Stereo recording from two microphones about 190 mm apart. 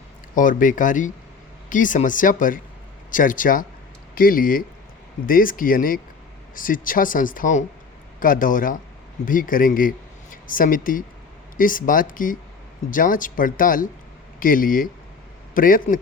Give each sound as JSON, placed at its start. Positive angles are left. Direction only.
{"t": 0.3, "sound": "speech", "side_deg": 45}